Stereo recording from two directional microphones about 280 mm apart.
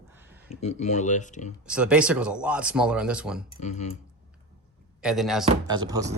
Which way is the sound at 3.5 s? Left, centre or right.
Left.